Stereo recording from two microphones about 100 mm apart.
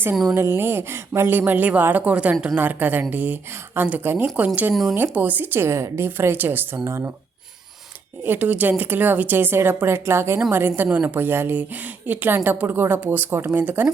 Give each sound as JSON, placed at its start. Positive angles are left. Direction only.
{"t": 0.3, "sound": "a woman's voice", "side_deg": -25}
{"t": 4.7, "sound": "speech", "side_deg": 0}
{"t": 5.1, "sound": "a woman's voice", "side_deg": -15}
{"t": 8.2, "sound": "a woman's voice", "side_deg": -20}
{"t": 10.8, "sound": "a woman's voice", "side_deg": -15}